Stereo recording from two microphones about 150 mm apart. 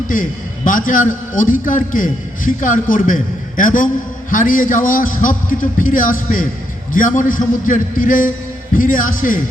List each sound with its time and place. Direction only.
0.1 s a man's voice: 65° left (ahead or behind)